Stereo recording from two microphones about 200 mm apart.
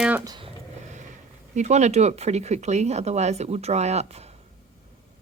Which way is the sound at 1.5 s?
35° right (ahead or behind).